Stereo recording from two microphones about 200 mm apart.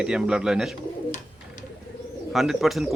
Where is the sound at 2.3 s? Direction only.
Centre (ahead or behind).